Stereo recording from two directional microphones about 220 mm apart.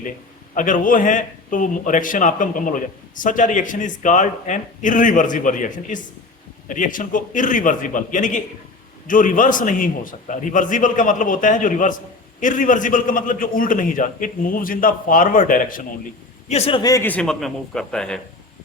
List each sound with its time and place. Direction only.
0.5 s a man's voice: 35° left (ahead or behind)
16.5 s a man's voice: 25° left (ahead or behind); by 18.2 s 5° left (ahead or behind)